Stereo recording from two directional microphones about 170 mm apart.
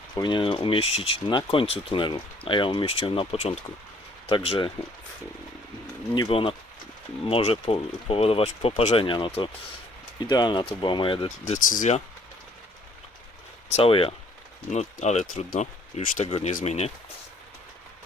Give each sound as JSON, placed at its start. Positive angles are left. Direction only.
{"t": 0.2, "sound": "speech", "side_deg": 30}
{"t": 6.2, "sound": "speech", "side_deg": 30}
{"t": 11.4, "sound": "speech", "side_deg": 50}
{"t": 13.7, "sound": "speech", "side_deg": 35}